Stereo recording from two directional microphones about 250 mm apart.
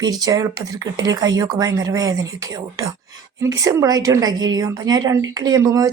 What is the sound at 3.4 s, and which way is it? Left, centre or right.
Speech, centre.